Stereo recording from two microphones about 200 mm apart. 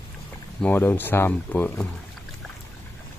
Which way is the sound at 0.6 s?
10° left (ahead or behind).